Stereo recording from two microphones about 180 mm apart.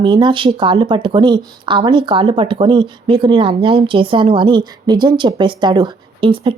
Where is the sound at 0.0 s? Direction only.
25° right (ahead or behind).